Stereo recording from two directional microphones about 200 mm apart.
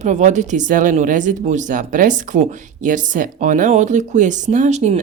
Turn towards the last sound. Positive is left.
turn(degrees=-35)  # may be behind; listen again after turning